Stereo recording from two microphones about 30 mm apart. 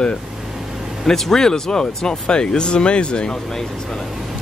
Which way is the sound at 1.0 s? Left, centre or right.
Centre.